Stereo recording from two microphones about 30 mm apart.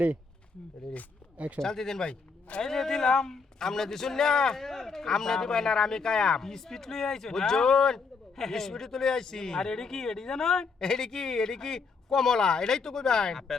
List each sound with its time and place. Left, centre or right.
1.6 s a man's voice: centre